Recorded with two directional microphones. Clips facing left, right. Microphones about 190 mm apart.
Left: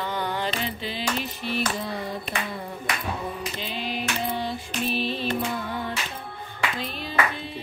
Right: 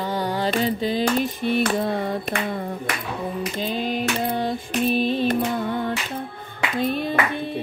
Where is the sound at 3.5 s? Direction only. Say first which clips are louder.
Right 6 dB; 45° right (ahead or behind).